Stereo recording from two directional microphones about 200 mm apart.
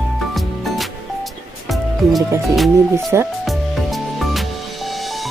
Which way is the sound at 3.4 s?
Centre (ahead or behind).